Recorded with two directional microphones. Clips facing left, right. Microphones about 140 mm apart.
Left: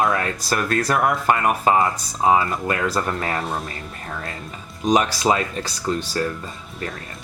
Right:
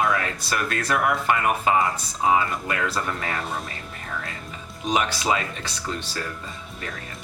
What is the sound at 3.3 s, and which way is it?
Speech, centre (ahead or behind).